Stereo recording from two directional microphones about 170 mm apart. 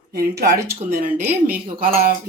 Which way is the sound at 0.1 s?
70° right (ahead or behind).